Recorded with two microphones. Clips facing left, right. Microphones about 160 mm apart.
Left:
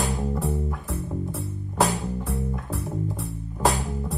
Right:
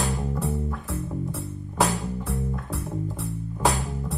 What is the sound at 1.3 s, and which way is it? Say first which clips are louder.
Music: left 1 dB; centre (ahead or behind).